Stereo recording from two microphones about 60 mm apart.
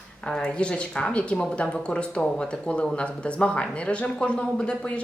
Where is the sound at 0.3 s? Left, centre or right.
Centre.